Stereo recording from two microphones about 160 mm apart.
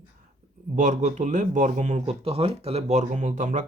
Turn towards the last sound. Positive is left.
turn(degrees=-50)  # may be behind; listen again after turning